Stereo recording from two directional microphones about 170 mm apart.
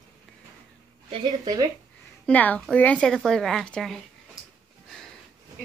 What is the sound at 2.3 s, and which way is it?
A woman's voice, 10° left (ahead or behind).